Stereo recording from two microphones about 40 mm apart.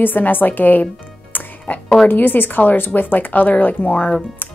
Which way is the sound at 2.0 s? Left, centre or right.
Left.